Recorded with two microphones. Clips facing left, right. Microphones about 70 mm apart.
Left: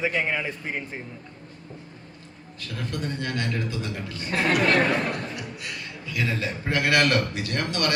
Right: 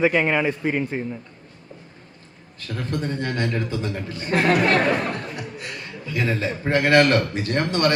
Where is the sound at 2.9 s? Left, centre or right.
Right.